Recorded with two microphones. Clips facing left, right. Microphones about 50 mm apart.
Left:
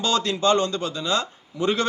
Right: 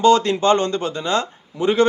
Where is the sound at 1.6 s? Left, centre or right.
Right.